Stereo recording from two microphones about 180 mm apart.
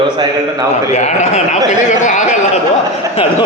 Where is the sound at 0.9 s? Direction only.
40° left (ahead or behind).